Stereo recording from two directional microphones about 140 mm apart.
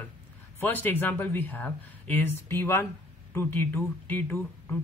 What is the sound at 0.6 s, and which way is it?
Speech, 15° left (ahead or behind).